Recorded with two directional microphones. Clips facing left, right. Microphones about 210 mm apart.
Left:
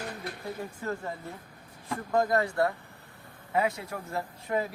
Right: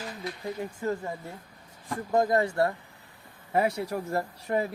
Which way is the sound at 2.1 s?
20° right (ahead or behind).